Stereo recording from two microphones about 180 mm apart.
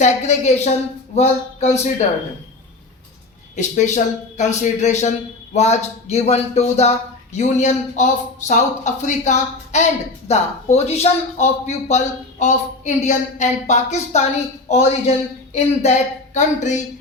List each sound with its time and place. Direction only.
0.0 s speech: 40° left (ahead or behind)
3.5 s speech: 40° left (ahead or behind)